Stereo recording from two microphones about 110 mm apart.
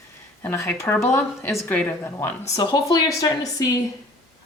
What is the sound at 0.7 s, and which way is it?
A woman's voice, 25° left (ahead or behind).